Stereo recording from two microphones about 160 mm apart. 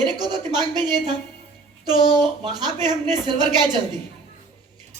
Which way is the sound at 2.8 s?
25° right (ahead or behind).